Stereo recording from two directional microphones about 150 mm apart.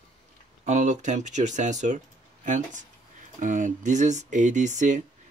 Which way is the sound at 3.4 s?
55° right (ahead or behind).